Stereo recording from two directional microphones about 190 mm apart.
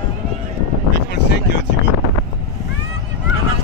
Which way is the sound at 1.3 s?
65° left (ahead or behind).